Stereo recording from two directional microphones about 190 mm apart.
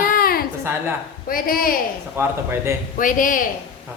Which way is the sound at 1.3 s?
50° left (ahead or behind).